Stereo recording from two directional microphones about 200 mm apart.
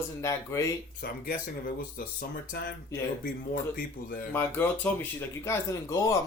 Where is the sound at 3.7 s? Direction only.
45° left (ahead or behind).